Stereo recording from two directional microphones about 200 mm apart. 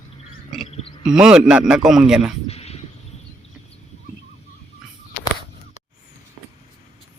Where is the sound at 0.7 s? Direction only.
30° left (ahead or behind).